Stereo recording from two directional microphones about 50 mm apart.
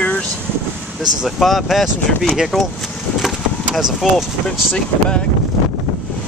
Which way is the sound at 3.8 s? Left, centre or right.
Centre.